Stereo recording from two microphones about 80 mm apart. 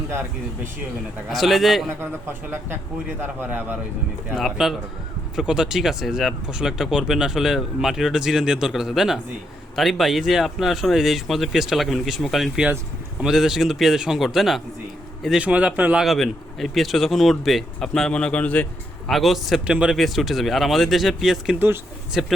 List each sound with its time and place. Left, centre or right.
1.3 s speech: centre
3.2 s a man's voice: right
4.4 s speech: centre
15.4 s speech: centre
16.0 s speech: centre
19.0 s speech: centre
19.6 s speech: centre
20.0 s speech: centre